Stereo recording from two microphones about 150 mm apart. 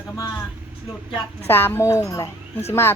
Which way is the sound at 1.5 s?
15° left (ahead or behind).